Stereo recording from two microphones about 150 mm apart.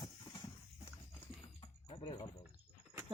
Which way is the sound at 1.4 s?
35° left (ahead or behind).